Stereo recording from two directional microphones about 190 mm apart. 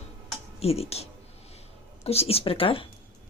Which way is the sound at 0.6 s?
30° left (ahead or behind).